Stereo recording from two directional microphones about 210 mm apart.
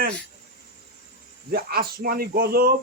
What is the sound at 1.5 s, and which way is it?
Speech, 45° right (ahead or behind).